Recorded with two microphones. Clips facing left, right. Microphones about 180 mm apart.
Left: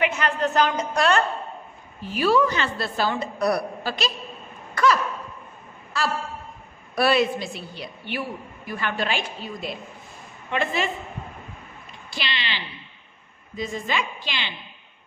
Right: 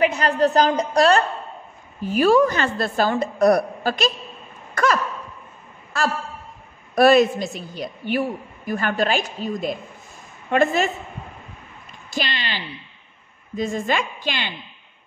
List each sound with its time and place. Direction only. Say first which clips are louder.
0.0 s a woman's voice: right 5 dB; 35° right (ahead or behind)
5.9 s a woman's voice: right 3 dB; 50° right (ahead or behind)
12.1 s a woman's voice: right 4 dB; 45° right (ahead or behind)